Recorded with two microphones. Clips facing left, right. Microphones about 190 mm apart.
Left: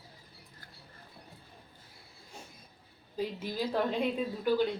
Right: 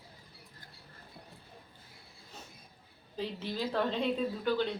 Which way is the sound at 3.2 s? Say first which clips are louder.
Left 2 dB; 10° left (ahead or behind).